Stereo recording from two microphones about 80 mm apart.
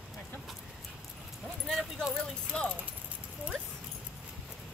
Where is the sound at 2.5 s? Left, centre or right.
Centre.